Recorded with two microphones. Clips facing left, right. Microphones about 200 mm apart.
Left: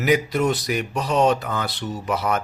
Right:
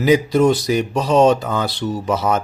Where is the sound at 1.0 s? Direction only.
90° right.